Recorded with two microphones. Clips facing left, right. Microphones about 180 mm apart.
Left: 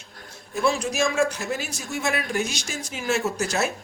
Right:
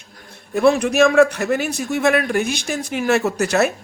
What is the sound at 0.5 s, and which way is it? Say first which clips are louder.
A woman's voice: right 9 dB; 60° right (ahead or behind).